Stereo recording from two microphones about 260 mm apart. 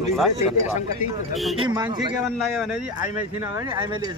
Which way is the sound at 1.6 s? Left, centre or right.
Centre.